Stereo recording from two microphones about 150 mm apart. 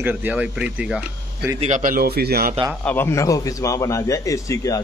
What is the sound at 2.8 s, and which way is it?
A man's voice, 10° left (ahead or behind).